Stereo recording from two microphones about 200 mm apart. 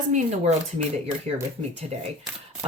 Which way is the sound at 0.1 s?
30° right (ahead or behind).